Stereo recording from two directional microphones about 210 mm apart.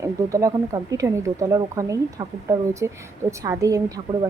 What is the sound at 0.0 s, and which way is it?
Speech, 15° right (ahead or behind).